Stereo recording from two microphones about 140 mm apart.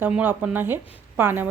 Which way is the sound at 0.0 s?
15° right (ahead or behind).